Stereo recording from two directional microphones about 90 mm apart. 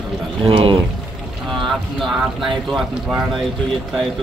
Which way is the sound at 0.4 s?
80° right.